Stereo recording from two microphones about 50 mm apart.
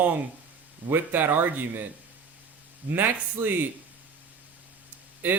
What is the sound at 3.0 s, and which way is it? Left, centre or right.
Speech, right.